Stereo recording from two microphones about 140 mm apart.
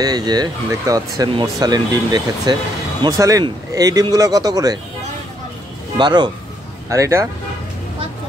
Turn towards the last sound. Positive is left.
turn(degrees=-20)  # may be behind; listen again after turning